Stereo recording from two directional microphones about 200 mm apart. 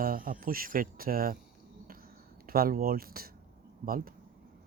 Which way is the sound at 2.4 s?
50° right (ahead or behind).